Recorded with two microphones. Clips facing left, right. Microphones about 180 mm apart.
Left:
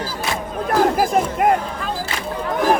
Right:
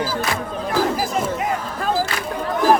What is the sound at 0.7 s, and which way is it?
Chatter, 55° left (ahead or behind).